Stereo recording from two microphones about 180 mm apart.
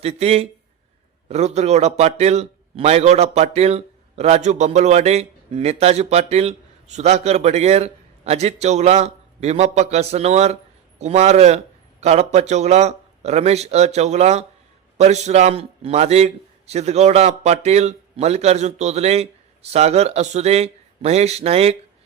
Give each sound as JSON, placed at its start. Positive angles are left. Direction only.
{"t": 0.0, "sound": "a man's voice", "side_deg": -35}